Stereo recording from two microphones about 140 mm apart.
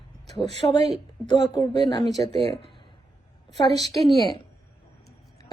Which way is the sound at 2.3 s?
45° right (ahead or behind).